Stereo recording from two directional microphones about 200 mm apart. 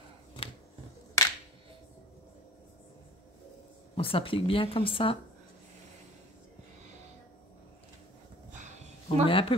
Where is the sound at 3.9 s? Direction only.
25° left (ahead or behind).